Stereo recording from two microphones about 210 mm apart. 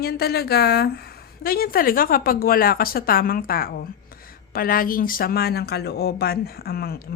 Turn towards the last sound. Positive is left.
turn(degrees=45)  # may be behind; listen again after turning